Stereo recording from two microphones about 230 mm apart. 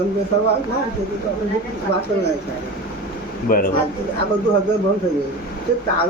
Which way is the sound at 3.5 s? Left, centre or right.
Left.